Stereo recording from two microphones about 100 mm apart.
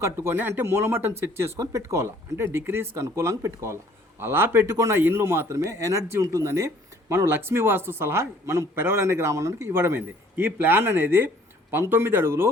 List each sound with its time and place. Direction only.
0.0 s a man's voice: 25° right (ahead or behind)